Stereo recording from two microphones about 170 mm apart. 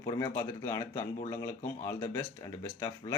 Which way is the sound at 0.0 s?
20° left (ahead or behind).